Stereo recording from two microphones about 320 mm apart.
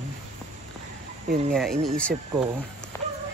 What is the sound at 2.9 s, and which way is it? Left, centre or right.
Music, centre.